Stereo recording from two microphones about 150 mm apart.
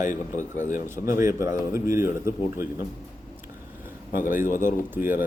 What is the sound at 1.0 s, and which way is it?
A man's voice, 20° right (ahead or behind).